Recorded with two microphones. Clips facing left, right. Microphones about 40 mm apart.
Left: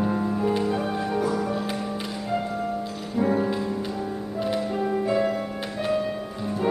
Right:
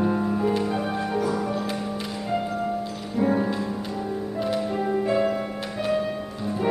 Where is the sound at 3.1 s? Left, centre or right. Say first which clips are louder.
Even; centre.